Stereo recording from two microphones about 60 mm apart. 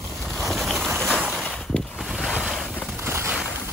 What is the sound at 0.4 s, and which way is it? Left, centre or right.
Boat, centre.